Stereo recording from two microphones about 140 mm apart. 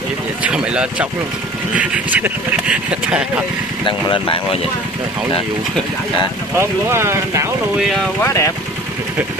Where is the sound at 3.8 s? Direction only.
35° left (ahead or behind).